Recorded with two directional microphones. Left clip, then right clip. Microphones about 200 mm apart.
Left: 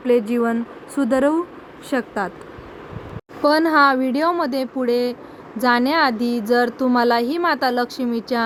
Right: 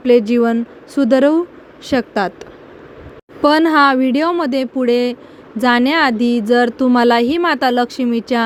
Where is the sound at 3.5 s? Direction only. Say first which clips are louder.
Right 3 dB; 65° right (ahead or behind).